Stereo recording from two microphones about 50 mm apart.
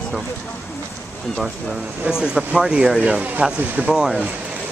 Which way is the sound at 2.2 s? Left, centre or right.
Centre.